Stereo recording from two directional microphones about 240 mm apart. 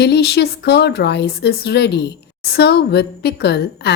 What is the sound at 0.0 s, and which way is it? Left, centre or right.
Speech, left.